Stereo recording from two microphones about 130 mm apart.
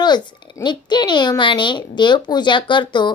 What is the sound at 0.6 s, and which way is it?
A child's voice, 35° left (ahead or behind).